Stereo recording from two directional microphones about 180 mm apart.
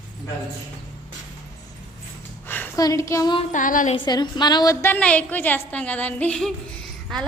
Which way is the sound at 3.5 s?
45° left (ahead or behind).